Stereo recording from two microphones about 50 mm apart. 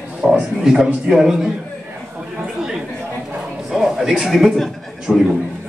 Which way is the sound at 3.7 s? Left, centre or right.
Centre.